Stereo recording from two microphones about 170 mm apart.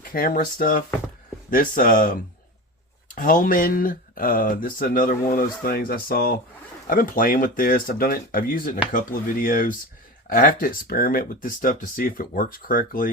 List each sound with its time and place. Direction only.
0.1 s speech: 55° left (ahead or behind)
3.2 s speech: 55° left (ahead or behind)